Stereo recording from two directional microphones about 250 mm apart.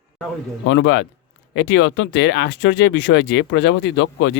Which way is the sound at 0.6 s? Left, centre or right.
Left.